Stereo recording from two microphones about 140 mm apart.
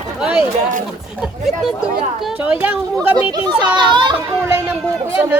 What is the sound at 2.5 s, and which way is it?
Speech, 10° right (ahead or behind).